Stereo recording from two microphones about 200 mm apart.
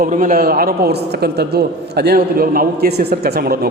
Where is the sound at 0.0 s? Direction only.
45° right (ahead or behind).